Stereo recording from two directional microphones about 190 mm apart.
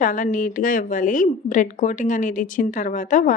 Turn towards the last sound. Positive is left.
turn(degrees=40)  # may be behind; listen again after turning